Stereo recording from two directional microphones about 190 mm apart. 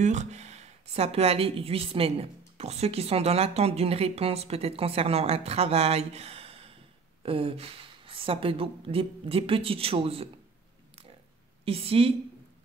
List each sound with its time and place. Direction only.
0.0 s speech: 40° right (ahead or behind)
11.6 s speech: 30° right (ahead or behind)